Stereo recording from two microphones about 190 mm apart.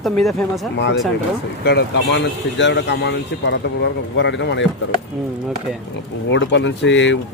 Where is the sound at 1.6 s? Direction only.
60° left (ahead or behind).